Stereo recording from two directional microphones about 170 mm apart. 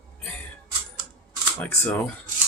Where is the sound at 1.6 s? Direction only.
10° left (ahead or behind).